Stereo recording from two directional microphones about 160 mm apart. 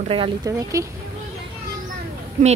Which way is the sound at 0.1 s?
30° right (ahead or behind).